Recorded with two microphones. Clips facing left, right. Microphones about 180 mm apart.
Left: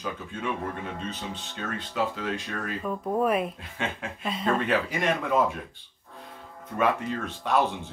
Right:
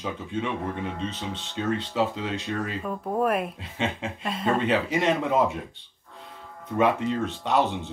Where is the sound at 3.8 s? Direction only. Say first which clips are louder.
Right 4 dB; 25° right (ahead or behind).